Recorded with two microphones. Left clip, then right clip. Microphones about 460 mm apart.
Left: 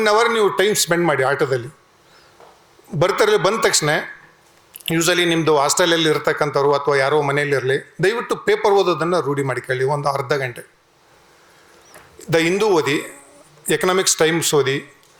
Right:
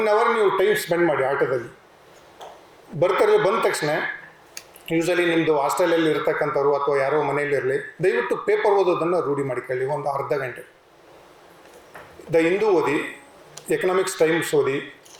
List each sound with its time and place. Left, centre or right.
0.0 s speech: left
3.0 s a man's voice: left
4.9 s a man's voice: left
12.3 s a man's voice: left